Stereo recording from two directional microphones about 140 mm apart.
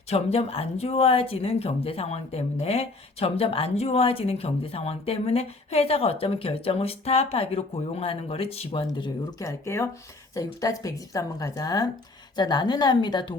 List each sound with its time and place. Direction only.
0.1 s speech: 45° left (ahead or behind)
9.4 s a woman's voice: 20° left (ahead or behind)